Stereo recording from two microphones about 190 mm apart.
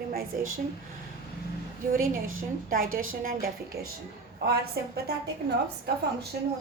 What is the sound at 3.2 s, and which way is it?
Speech, 50° right (ahead or behind).